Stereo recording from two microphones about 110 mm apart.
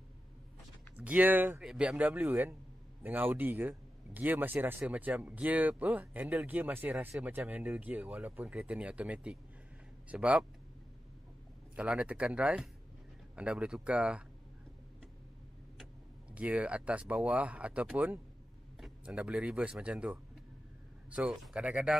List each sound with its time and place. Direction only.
0.9 s speech: 15° right (ahead or behind)
11.7 s speech: 10° right (ahead or behind)
16.3 s speech: 10° right (ahead or behind)